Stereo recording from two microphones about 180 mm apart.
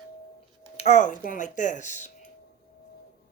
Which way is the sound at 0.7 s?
40° left (ahead or behind).